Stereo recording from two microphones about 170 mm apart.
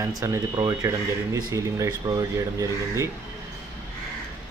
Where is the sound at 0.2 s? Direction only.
15° right (ahead or behind).